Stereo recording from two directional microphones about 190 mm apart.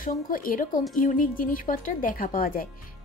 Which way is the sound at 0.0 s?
45° left (ahead or behind).